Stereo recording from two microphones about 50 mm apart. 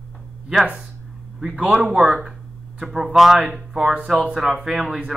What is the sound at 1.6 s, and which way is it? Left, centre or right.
Speech, centre.